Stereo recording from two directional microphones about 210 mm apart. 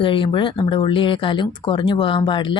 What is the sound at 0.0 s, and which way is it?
Speech, 25° left (ahead or behind).